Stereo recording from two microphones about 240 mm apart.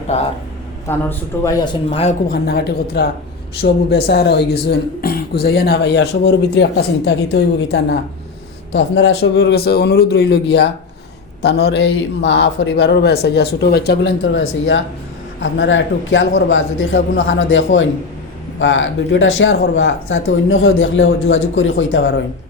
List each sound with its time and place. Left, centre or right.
0.1 s speech: left
0.9 s a man's voice: centre
2.3 s speech: left